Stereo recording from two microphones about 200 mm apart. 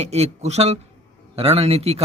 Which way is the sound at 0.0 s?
30° right (ahead or behind).